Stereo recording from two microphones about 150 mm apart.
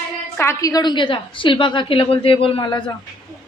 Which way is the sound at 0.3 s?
20° left (ahead or behind).